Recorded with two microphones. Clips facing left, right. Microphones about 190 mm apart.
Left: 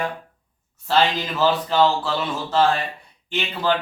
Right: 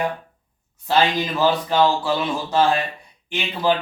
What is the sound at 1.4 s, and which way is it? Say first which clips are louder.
Speech: even; 15° right (ahead or behind).